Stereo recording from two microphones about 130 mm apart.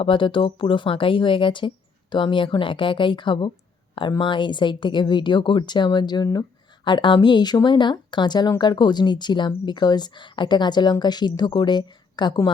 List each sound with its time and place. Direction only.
0.0 s speech: 40° left (ahead or behind)